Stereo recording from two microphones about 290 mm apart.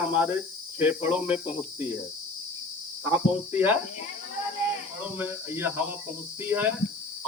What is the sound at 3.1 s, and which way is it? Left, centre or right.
Speech, centre.